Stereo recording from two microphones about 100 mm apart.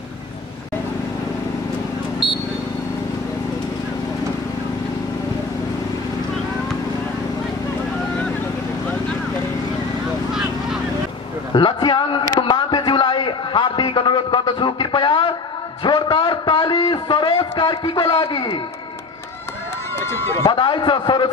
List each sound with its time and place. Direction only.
11.5 s a sound: 50° left (ahead or behind)
20.0 s speech: 25° left (ahead or behind)
20.4 s a man's voice: 50° left (ahead or behind)